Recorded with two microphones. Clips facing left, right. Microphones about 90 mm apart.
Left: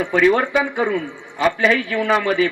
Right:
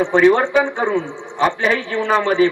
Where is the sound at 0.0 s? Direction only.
30° right (ahead or behind).